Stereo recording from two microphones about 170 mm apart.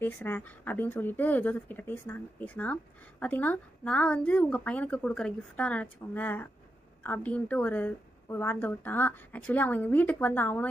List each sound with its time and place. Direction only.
0.0 s a woman's voice: 10° left (ahead or behind)